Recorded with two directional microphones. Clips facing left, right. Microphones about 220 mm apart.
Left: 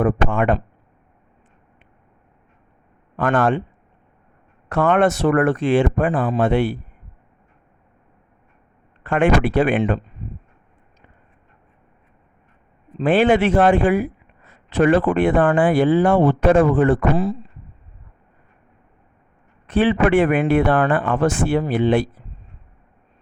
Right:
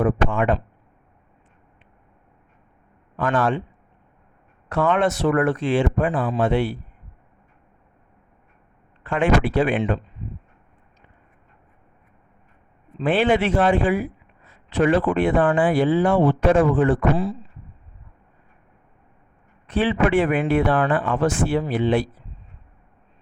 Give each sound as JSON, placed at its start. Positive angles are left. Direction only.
{"t": 0.0, "sound": "speech", "side_deg": 55}
{"t": 3.2, "sound": "speech", "side_deg": 55}
{"t": 4.7, "sound": "speech", "side_deg": 55}
{"t": 9.0, "sound": "speech", "side_deg": 55}
{"t": 13.0, "sound": "speech", "side_deg": 45}
{"t": 19.6, "sound": "speech", "side_deg": 50}